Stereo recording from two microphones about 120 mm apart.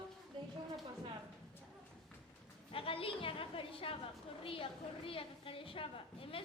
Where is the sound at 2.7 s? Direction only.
50° left (ahead or behind).